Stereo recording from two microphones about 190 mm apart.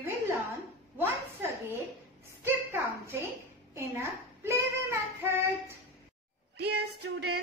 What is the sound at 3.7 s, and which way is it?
Child singing, 15° right (ahead or behind).